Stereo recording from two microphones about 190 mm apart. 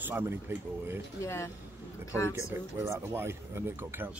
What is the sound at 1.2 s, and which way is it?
Speech, 15° left (ahead or behind).